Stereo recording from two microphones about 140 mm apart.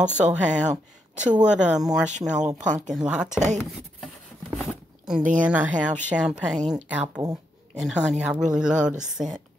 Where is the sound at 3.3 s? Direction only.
60° right (ahead or behind).